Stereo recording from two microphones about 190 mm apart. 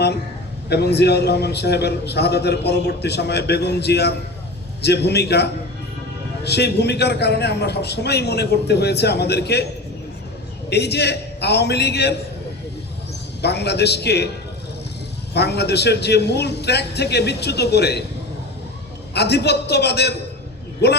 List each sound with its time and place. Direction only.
0.7 s a man's voice: 60° left (ahead or behind)
10.7 s a man's voice: 60° left (ahead or behind)
13.4 s a man's voice: 60° left (ahead or behind)
15.3 s a man's voice: 60° left (ahead or behind)
19.1 s a man's voice: 60° left (ahead or behind)